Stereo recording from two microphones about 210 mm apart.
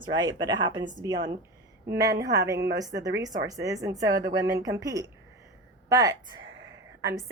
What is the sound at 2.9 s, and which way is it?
Speech, 50° right (ahead or behind).